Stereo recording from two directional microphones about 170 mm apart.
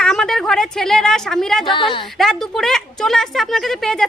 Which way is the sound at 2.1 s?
Centre (ahead or behind).